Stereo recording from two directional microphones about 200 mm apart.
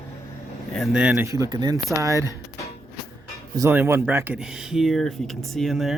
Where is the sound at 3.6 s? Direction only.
10° right (ahead or behind).